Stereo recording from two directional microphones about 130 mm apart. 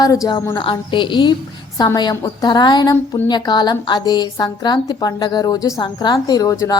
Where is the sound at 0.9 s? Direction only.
40° left (ahead or behind).